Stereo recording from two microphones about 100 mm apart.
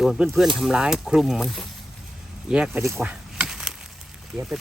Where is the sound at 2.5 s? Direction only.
10° right (ahead or behind).